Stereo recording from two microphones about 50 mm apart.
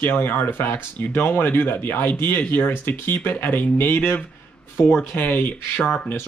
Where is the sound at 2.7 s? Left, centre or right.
Left.